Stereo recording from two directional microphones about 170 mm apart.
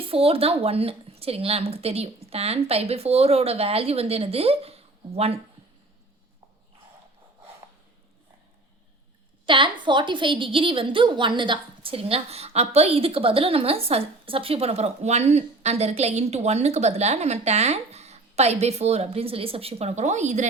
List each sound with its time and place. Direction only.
0.0 s a woman's voice: 35° right (ahead or behind)
9.5 s a woman's voice: 30° right (ahead or behind); by 20.5 s 45° right (ahead or behind)